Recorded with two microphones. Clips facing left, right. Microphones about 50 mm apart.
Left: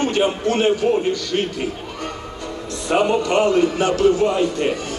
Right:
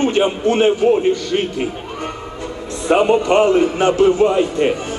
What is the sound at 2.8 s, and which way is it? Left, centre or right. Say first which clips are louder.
Speech: right 4 dB; right.